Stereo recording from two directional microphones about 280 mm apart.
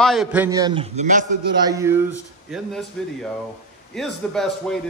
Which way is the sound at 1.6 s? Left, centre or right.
Centre.